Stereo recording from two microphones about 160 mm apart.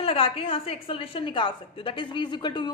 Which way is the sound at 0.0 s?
35° left (ahead or behind).